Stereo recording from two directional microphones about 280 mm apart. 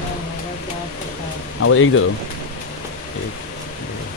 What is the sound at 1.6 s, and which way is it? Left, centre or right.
Speech, left.